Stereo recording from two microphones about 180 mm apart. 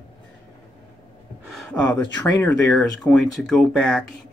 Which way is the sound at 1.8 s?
25° left (ahead or behind).